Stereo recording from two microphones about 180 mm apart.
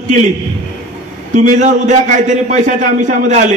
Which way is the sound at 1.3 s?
40° right (ahead or behind).